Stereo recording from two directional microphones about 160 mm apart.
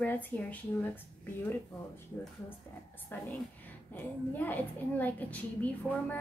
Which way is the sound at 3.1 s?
10° left (ahead or behind).